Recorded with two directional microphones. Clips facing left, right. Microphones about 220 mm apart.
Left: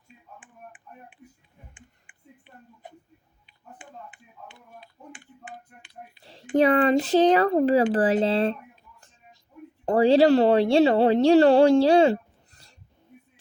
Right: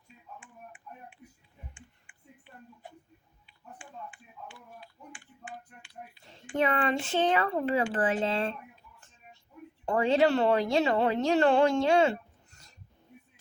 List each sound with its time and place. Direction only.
0.3 s finger snapping: 15° left (ahead or behind)
2.1 s a sound: 20° left (ahead or behind)
3.4 s typing: 20° left (ahead or behind)
6.2 s a sound: 35° left (ahead or behind)
6.6 s speech: 40° left (ahead or behind)
9.8 s speech: 35° left (ahead or behind)